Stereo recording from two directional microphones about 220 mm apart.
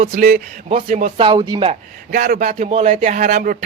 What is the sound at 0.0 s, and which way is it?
Speech, 30° right (ahead or behind).